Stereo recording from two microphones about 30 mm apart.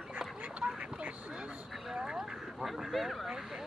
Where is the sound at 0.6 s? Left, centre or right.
Right.